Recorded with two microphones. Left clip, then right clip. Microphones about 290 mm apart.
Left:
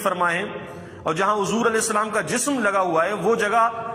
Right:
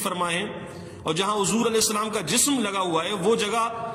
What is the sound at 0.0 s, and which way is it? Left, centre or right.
A man's voice, centre.